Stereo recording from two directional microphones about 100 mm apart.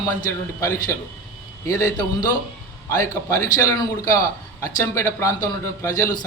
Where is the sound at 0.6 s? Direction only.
30° left (ahead or behind).